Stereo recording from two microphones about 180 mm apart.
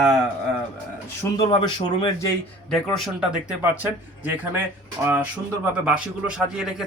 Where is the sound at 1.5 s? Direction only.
25° left (ahead or behind).